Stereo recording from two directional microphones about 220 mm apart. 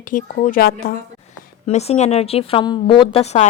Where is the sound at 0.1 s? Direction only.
35° left (ahead or behind).